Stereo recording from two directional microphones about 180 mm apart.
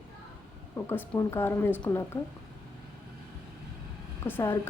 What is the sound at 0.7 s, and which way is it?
Speech, 15° left (ahead or behind).